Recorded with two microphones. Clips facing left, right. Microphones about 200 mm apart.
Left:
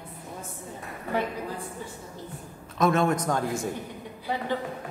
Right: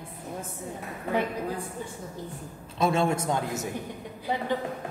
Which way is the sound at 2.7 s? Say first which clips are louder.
Left 2 dB; 30° right (ahead or behind).